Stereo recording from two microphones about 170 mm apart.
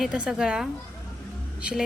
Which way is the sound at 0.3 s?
5° right (ahead or behind).